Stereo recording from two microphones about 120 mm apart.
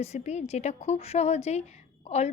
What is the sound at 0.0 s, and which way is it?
A woman's voice, 65° left (ahead or behind).